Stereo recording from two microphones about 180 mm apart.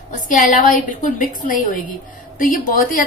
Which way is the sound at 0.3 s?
45° left (ahead or behind).